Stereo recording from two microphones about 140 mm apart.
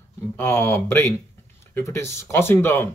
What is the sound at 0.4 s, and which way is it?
Speech, 15° left (ahead or behind).